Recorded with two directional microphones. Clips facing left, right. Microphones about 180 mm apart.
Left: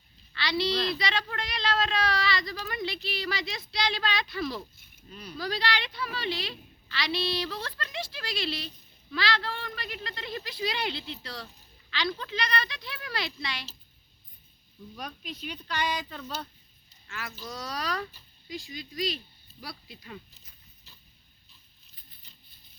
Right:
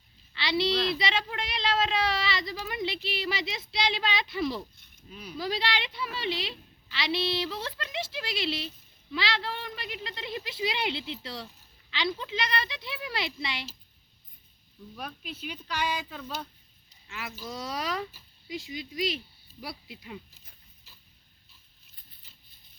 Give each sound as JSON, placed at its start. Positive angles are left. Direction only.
{"t": 0.3, "sound": "a sound", "side_deg": -25}
{"t": 0.9, "sound": "a woman's voice", "side_deg": -20}
{"t": 5.0, "sound": "speech", "side_deg": -5}
{"t": 5.4, "sound": "a woman's voice", "side_deg": -20}
{"t": 14.9, "sound": "speech", "side_deg": -5}
{"t": 17.1, "sound": "a woman's voice", "side_deg": -20}
{"t": 20.9, "sound": "mechanisms", "side_deg": -10}